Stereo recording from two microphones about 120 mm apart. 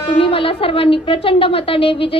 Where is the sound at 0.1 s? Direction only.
50° left (ahead or behind).